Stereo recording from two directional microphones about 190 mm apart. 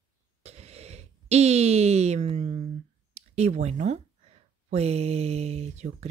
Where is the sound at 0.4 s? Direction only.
35° right (ahead or behind).